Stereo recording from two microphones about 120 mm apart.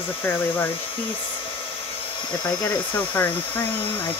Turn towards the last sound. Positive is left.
turn(degrees=15)  # may be behind; listen again after turning